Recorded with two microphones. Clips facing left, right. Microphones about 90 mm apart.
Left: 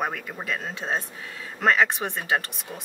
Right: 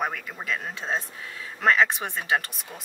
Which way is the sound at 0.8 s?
5° left (ahead or behind).